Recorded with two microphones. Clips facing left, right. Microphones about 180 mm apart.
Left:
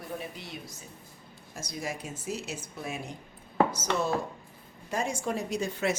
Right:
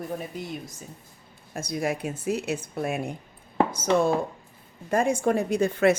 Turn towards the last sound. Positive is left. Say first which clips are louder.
# right 9 dB
turn(degrees=-60)  # may be behind; listen again after turning